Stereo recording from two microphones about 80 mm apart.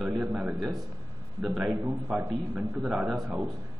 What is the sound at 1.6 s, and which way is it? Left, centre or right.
A man's voice, centre.